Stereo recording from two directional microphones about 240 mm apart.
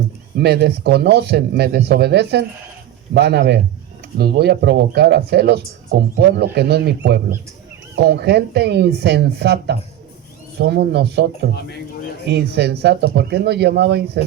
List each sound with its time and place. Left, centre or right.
0.3 s speech: right
12.3 s speech: right